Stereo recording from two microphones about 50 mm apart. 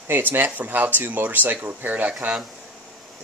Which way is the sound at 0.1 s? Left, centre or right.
Right.